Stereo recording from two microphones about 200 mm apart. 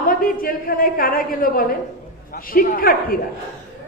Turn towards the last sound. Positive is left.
turn(degrees=45)  # may be behind; listen again after turning